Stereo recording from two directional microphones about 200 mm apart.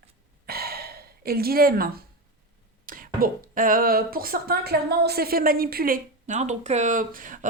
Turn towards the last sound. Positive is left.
turn(degrees=-40)  # may be behind; listen again after turning